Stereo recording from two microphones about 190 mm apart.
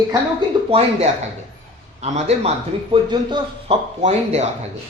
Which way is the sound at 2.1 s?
35° right (ahead or behind).